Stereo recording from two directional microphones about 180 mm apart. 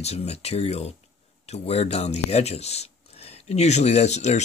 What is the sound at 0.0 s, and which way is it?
Speech, 35° left (ahead or behind).